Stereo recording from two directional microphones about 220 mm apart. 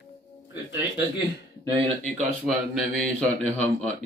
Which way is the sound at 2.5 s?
Centre (ahead or behind).